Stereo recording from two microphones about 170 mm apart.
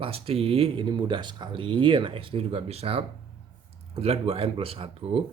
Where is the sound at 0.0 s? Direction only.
35° right (ahead or behind).